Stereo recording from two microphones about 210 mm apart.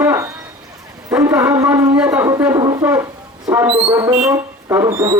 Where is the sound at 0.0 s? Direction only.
15° right (ahead or behind).